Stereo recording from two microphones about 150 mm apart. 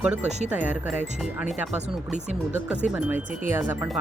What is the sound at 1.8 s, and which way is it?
Speech, 50° right (ahead or behind).